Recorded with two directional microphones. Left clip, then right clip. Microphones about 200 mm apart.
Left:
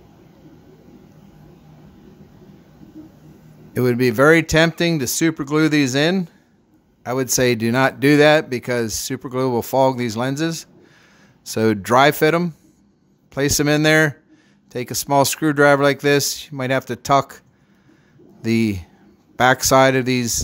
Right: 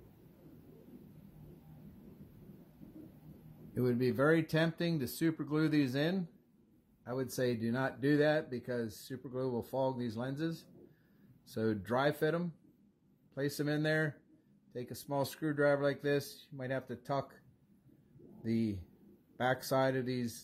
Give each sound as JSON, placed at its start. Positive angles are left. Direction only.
{"t": 3.7, "sound": "speech", "side_deg": 35}
{"t": 18.4, "sound": "speech", "side_deg": 40}